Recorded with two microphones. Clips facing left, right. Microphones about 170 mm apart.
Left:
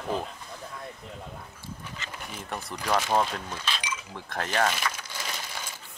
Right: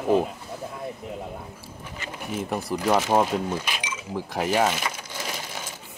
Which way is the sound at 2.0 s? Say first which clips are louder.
Right 9 dB; 10° right (ahead or behind).